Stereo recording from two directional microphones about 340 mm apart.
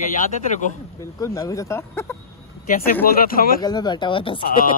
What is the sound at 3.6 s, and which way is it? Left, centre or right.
Speech, centre.